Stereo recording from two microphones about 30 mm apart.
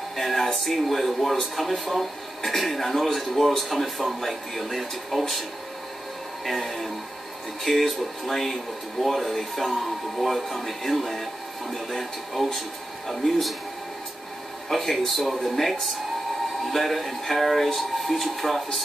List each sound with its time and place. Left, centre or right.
0.1 s speech: centre
6.4 s speech: centre
14.7 s speech: centre